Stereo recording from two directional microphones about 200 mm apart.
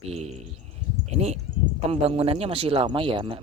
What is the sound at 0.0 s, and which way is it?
Speech, 30° right (ahead or behind).